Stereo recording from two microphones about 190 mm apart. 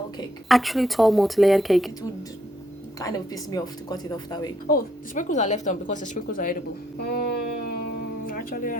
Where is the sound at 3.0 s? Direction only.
20° left (ahead or behind).